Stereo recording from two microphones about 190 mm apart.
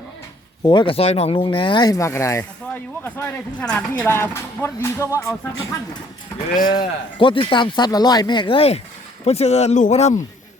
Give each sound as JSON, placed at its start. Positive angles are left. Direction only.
{"t": 0.6, "sound": "speech", "side_deg": 25}
{"t": 6.7, "sound": "speech", "side_deg": 25}